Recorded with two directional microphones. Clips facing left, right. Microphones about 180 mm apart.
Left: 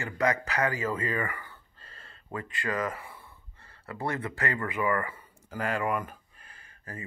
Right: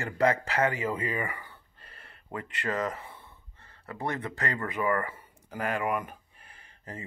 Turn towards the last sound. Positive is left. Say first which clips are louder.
# right 1 dB
turn(degrees=-20)  # may be behind; listen again after turning